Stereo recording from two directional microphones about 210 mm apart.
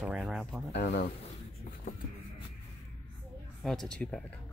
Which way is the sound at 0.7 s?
55° left (ahead or behind).